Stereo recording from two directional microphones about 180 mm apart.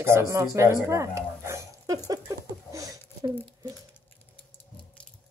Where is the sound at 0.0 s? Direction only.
15° right (ahead or behind).